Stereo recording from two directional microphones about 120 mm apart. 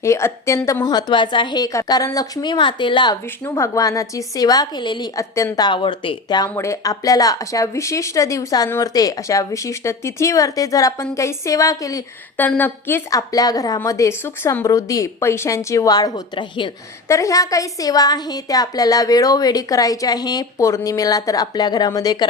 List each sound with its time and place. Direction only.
0.0 s a woman's voice: 25° left (ahead or behind); by 3.2 s 40° left (ahead or behind)
3.4 s speech: 25° left (ahead or behind)
5.1 s speech: 25° left (ahead or behind)
5.6 s speech: 40° left (ahead or behind)
12.4 s a woman's voice: 15° left (ahead or behind)
13.1 s a woman's voice: 30° left (ahead or behind)